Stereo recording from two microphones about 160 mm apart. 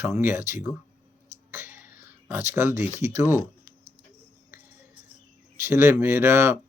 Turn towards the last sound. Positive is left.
turn(degrees=-15)  # may be behind; listen again after turning